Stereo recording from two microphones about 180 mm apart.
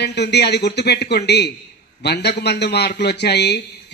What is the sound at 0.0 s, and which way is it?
A man's voice, 70° left (ahead or behind).